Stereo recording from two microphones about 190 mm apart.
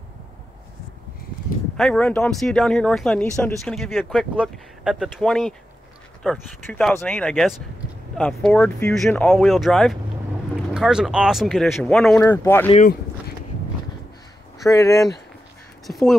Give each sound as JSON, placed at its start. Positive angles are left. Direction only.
{"t": 1.8, "sound": "speech", "side_deg": 5}
{"t": 14.6, "sound": "speech", "side_deg": 15}
{"t": 15.9, "sound": "speech", "side_deg": 0}